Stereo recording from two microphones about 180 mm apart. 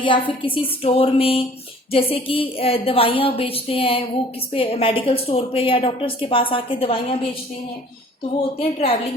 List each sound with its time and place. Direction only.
0.0 s a woman's voice: 30° left (ahead or behind)
8.5 s a woman's voice: 30° left (ahead or behind)